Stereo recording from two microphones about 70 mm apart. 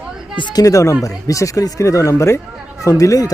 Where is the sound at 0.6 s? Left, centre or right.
Left.